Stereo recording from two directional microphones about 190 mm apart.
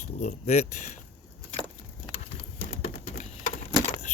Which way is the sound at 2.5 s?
50° left (ahead or behind).